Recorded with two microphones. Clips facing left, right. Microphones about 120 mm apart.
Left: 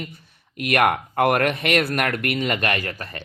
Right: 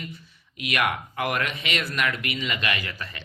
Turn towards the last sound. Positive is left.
turn(degrees=50)  # may be behind; listen again after turning